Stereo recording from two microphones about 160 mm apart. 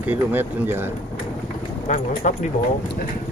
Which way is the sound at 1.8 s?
55° left (ahead or behind).